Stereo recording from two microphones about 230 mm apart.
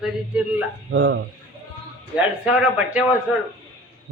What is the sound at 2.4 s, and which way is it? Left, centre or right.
Speech, centre.